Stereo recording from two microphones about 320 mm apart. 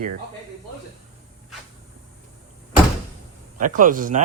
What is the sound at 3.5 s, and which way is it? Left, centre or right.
Speech, right.